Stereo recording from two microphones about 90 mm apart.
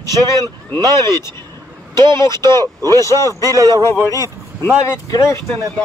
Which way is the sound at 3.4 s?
40° right (ahead or behind).